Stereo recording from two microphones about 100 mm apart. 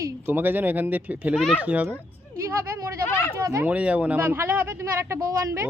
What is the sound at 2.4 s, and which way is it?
Speech, 30° right (ahead or behind).